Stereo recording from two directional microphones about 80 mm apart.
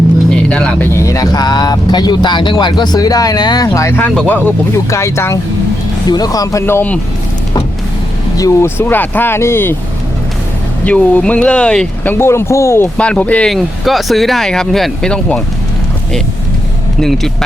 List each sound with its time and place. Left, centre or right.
0.3 s music: centre
0.9 s speech: left
3.7 s speech: left
4.3 s speech: centre
4.9 s speech: left
6.1 s speech: left
8.6 s speech: left
10.8 s speech: centre
12.0 s speech: left
13.0 s speech: centre
13.5 s speech: centre
17.0 s speech: centre